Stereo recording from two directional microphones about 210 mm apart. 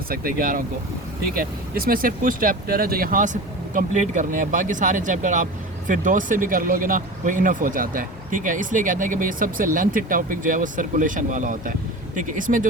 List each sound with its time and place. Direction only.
0.1 s speech: 45° right (ahead or behind)